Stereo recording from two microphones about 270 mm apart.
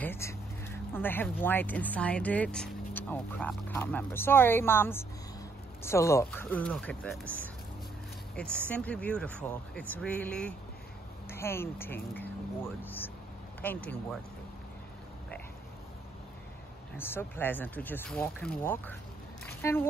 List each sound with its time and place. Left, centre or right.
0.0 s speech: centre
8.4 s speech: centre
16.9 s speech: centre